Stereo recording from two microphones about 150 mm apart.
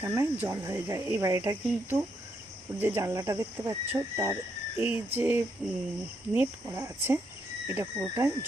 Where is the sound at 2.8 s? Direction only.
15° right (ahead or behind).